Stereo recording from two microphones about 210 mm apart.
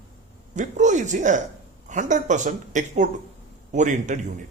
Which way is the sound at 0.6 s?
35° right (ahead or behind).